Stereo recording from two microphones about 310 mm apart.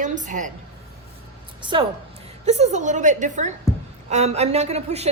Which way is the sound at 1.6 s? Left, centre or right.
Centre.